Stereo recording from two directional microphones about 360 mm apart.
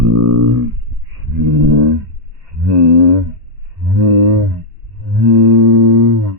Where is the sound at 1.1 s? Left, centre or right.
Right.